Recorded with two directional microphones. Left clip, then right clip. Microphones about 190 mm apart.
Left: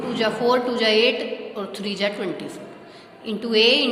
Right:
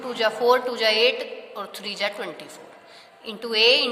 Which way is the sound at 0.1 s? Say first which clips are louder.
Right 1 dB; 40° right (ahead or behind).